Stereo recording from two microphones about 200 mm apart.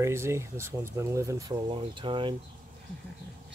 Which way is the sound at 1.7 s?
25° right (ahead or behind).